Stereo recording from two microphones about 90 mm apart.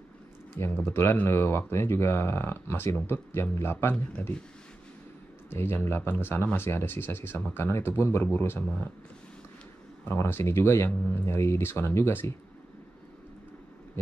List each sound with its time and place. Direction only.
0.6 s speech: 25° left (ahead or behind)
5.5 s speech: 25° left (ahead or behind)
10.0 s speech: 25° left (ahead or behind)